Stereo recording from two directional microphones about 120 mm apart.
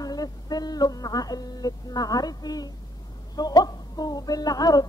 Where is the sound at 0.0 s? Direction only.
30° left (ahead or behind).